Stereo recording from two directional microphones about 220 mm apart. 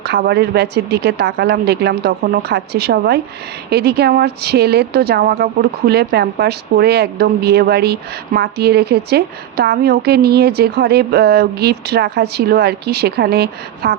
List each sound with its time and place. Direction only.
0.1 s speech: 45° right (ahead or behind)